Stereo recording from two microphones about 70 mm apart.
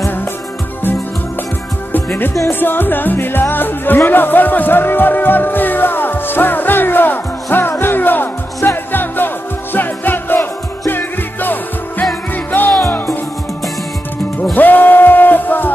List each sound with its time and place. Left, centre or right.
2.6 s music: left
14.5 s music: left